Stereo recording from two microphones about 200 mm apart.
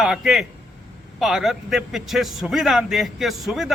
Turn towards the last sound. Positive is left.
turn(degrees=0)  # may be behind; listen again after turning